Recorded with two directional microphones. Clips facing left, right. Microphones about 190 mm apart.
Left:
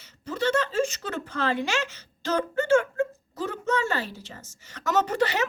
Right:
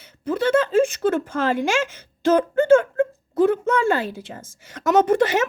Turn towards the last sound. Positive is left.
turn(degrees=-50)  # may be behind; listen again after turning